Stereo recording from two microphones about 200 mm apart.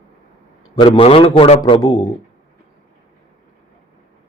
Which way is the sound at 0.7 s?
25° left (ahead or behind).